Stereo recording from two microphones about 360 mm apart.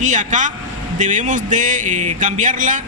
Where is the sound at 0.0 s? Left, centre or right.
Centre.